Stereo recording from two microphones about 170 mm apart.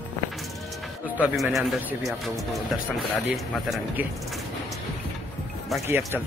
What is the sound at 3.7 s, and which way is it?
Speech, 10° right (ahead or behind).